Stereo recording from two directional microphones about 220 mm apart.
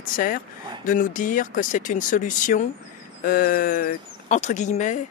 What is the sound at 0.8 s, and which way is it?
Speech, 35° left (ahead or behind).